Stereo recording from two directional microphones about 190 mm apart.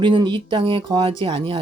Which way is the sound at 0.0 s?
25° right (ahead or behind).